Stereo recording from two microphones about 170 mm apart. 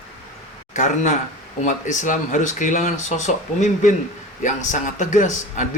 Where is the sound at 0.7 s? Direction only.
45° left (ahead or behind).